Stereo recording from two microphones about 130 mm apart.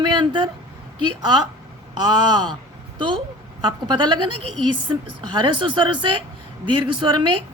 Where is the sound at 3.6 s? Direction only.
35° right (ahead or behind).